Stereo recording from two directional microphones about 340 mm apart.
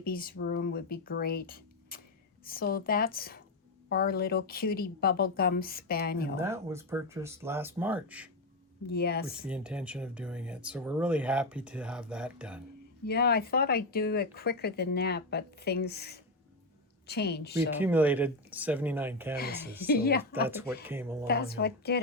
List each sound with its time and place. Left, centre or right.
0.0 s speech: left
6.3 s speech: centre
8.9 s speech: left
9.4 s speech: centre
13.1 s speech: left
17.7 s speech: centre
19.4 s speech: left
20.3 s speech: centre
21.2 s speech: left